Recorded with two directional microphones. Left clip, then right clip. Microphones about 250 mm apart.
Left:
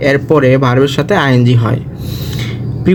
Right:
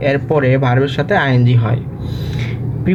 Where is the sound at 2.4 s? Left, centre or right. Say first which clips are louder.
Left 3 dB; left.